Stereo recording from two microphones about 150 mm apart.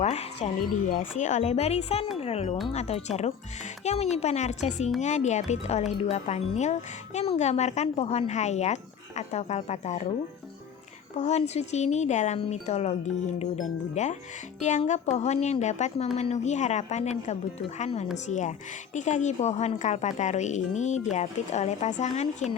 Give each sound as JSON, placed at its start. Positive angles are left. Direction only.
{"t": 0.0, "sound": "wind chime", "side_deg": 45}
{"t": 0.9, "sound": "speech", "side_deg": 60}
{"t": 11.2, "sound": "speech", "side_deg": 45}